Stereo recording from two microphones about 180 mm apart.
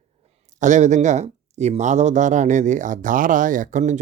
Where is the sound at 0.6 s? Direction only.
45° right (ahead or behind).